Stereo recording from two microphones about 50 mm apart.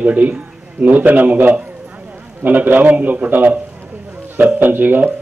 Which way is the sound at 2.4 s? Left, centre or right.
Right.